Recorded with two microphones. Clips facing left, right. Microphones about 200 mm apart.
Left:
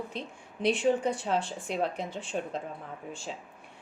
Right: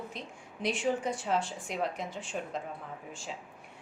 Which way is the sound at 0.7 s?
65° left (ahead or behind).